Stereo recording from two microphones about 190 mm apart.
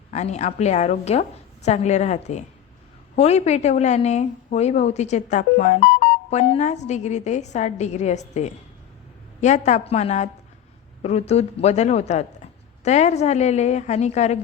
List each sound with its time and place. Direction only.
0.1 s a woman's voice: 35° left (ahead or behind)